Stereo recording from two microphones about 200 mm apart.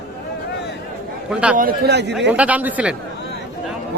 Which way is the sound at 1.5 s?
50° right (ahead or behind).